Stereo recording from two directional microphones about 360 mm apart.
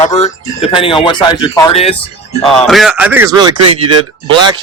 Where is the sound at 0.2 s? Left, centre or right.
Centre.